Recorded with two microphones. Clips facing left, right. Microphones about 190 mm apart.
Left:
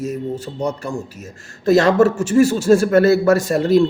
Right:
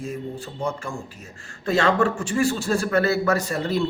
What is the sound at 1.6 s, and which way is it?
A man's voice, 40° left (ahead or behind).